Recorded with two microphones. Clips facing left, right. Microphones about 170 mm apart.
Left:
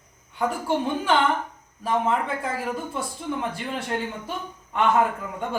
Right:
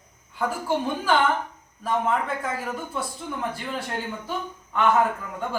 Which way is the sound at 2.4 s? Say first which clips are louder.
Left 2 dB; 30° left (ahead or behind).